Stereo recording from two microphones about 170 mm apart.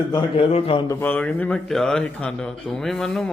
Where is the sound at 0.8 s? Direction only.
15° left (ahead or behind).